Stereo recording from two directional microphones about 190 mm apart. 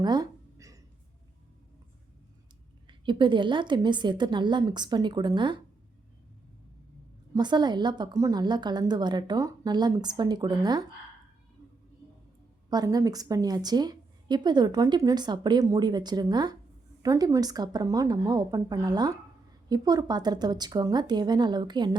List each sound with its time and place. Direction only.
0.0 s a sound: 20° right (ahead or behind)
3.1 s a woman's voice: 25° right (ahead or behind)
7.3 s a woman's voice: 25° right (ahead or behind)
12.7 s a woman's voice: 20° right (ahead or behind)